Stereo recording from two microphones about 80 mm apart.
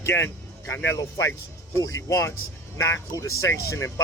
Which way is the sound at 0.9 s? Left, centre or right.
Left.